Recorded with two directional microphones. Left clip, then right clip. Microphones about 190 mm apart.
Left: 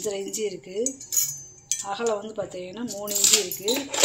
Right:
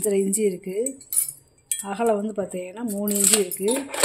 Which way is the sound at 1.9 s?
60° right (ahead or behind).